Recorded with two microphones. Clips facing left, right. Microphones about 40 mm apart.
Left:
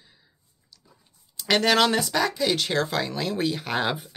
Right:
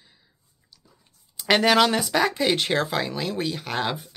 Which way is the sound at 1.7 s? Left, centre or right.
Centre.